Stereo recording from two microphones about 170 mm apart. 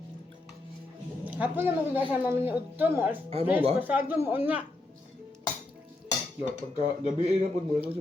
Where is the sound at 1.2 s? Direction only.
10° right (ahead or behind).